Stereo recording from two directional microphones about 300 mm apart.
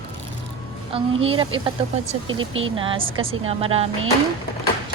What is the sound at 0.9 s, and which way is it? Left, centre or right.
Speech, centre.